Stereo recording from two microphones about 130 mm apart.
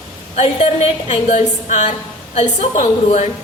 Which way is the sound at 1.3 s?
65° left (ahead or behind).